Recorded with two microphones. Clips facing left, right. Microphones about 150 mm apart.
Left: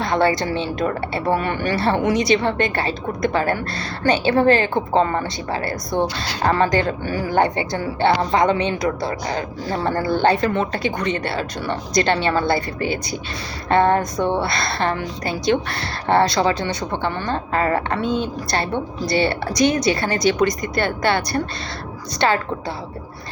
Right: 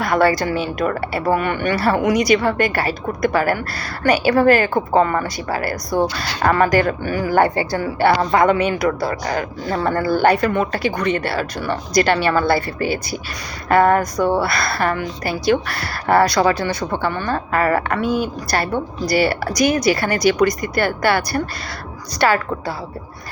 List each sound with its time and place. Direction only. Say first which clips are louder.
0.0 s speech: right 2 dB; 25° left (ahead or behind)